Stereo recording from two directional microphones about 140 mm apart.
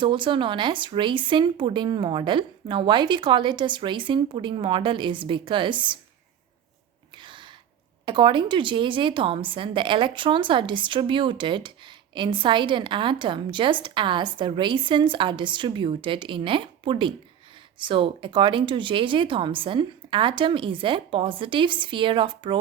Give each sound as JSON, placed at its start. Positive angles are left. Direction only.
{"t": 0.0, "sound": "speech", "side_deg": -35}
{"t": 7.2, "sound": "a sound", "side_deg": -35}
{"t": 8.0, "sound": "speech", "side_deg": -35}